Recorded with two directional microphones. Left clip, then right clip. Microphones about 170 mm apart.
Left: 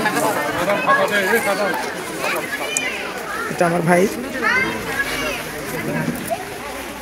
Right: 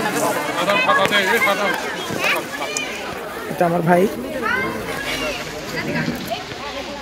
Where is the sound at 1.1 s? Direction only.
60° left (ahead or behind).